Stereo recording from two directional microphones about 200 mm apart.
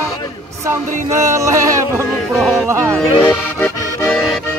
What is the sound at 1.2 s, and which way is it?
Music, 15° right (ahead or behind).